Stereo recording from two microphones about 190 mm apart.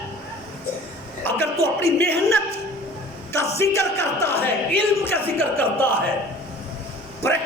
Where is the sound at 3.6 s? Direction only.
15° left (ahead or behind).